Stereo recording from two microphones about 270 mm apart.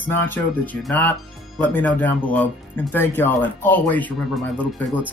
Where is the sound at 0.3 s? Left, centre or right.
Centre.